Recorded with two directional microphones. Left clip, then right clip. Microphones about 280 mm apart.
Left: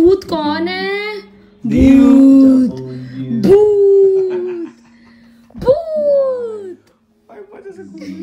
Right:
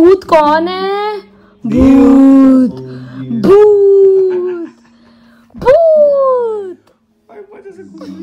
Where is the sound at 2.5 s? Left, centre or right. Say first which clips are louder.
Right 3 dB; centre.